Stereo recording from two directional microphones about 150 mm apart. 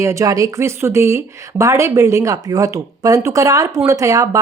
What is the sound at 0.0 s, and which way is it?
Speech, 20° right (ahead or behind).